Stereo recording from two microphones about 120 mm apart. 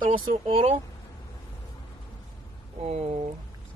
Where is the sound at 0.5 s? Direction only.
50° right (ahead or behind).